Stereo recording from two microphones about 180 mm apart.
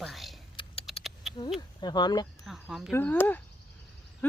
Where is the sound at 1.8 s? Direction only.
25° left (ahead or behind).